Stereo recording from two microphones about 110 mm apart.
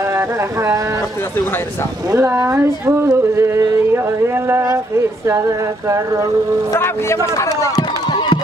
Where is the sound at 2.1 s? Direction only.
25° right (ahead or behind).